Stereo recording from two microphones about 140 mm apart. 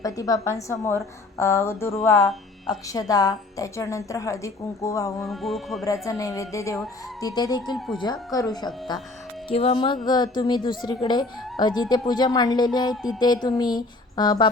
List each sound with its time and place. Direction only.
0.0 s a woman's voice: 25° left (ahead or behind)
5.2 s music: centre (ahead or behind)
5.8 s a woman's voice: 25° left (ahead or behind)
9.5 s a woman's voice: 45° left (ahead or behind)